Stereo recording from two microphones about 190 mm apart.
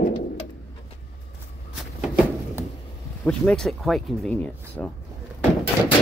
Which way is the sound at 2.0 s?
5° right (ahead or behind).